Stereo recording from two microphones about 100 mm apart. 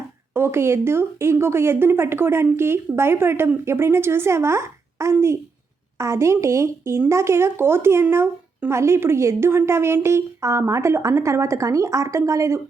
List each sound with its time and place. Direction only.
0.3 s speech: 25° right (ahead or behind)